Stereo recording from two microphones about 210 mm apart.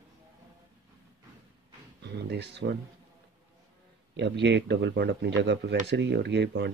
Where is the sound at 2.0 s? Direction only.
55° right (ahead or behind).